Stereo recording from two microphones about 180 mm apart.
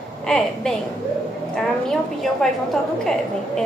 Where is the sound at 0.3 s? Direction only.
5° left (ahead or behind).